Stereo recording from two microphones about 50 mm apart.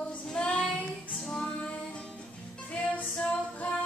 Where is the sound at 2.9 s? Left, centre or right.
Left.